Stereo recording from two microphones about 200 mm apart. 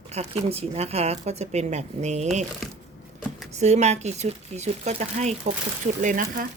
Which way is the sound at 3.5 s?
35° right (ahead or behind).